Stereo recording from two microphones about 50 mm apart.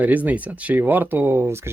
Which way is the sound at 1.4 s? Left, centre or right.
Right.